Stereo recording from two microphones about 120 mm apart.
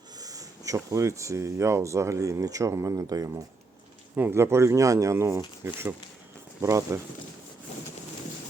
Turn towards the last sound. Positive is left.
turn(degrees=-25)  # may be behind; listen again after turning